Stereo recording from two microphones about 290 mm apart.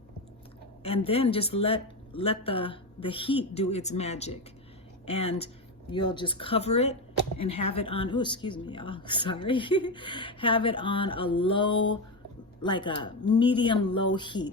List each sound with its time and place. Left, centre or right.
1.0 s speech: centre